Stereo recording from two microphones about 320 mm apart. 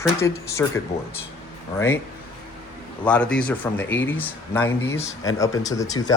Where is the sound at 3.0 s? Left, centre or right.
Centre.